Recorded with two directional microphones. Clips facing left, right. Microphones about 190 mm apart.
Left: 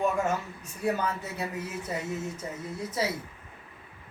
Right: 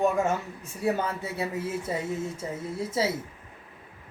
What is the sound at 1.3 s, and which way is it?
Speech, 25° right (ahead or behind).